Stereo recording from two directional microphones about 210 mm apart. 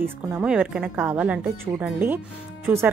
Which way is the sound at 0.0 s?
10° right (ahead or behind).